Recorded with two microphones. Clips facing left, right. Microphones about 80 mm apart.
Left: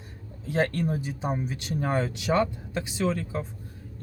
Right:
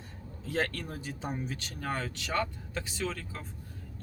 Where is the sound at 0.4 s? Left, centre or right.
Centre.